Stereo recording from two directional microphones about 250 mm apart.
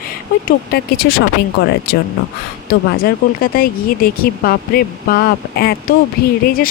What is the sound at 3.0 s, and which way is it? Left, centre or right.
Speech, left.